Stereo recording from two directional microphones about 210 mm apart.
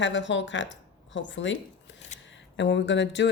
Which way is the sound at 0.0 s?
60° left (ahead or behind).